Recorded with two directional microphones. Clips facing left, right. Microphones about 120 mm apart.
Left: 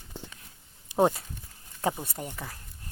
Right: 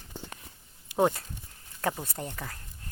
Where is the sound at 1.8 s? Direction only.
15° left (ahead or behind).